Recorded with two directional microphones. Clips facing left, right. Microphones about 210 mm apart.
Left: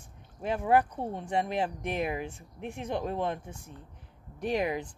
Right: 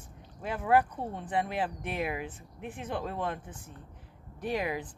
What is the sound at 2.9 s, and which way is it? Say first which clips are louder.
Speech: left 3 dB; 15° left (ahead or behind).